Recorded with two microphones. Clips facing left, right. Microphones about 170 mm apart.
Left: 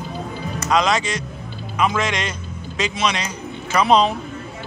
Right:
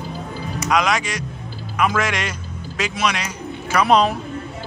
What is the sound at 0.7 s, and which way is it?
A man's voice, 10° right (ahead or behind).